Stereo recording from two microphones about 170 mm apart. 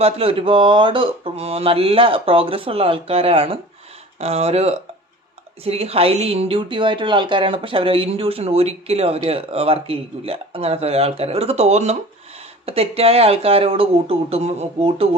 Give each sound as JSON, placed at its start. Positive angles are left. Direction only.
{"t": 0.0, "sound": "speech", "side_deg": -35}